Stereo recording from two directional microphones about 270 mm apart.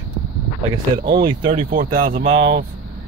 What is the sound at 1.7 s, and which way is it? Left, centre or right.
Speech, right.